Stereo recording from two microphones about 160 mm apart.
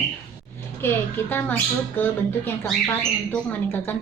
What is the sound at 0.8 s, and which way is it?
A woman's voice, 15° left (ahead or behind).